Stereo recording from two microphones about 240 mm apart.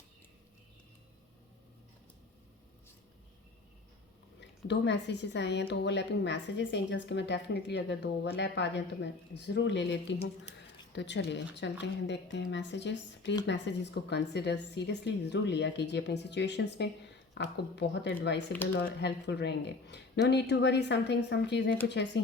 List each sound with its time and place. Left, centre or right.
4.4 s a woman's voice: left